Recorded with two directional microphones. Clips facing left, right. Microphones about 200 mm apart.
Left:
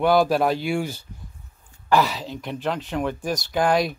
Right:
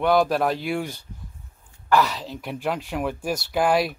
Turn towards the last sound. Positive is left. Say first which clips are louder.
# even
turn(degrees=-5)  # may be behind; listen again after turning